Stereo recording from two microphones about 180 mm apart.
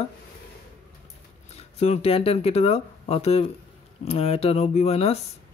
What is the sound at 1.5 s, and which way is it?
Speech, 35° left (ahead or behind).